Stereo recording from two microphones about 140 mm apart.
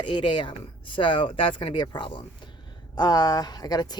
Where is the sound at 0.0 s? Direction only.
35° left (ahead or behind).